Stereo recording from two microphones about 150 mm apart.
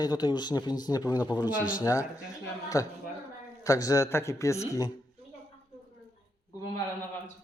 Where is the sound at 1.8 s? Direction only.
20° left (ahead or behind).